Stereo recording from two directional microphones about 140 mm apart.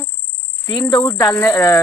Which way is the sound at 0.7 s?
30° left (ahead or behind).